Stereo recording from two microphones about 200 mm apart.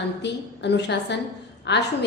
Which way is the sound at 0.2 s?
60° left (ahead or behind).